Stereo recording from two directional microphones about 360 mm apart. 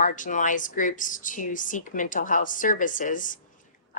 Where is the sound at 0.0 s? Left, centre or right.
Left.